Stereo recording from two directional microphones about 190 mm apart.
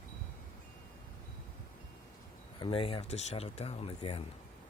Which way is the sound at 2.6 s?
30° left (ahead or behind).